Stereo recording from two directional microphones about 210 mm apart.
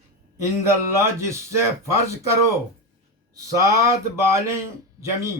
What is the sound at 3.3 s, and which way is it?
Speech, 15° right (ahead or behind).